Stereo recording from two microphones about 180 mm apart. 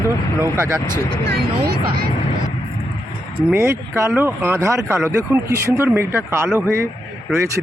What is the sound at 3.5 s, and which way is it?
Speech, 15° right (ahead or behind).